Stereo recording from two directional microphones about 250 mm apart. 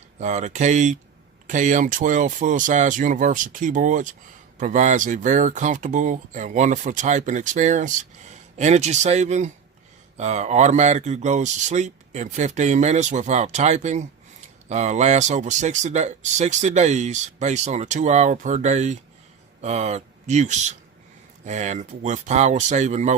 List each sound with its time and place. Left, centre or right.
0.2 s speech: right